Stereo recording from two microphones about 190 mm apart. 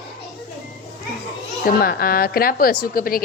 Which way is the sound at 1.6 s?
50° left (ahead or behind).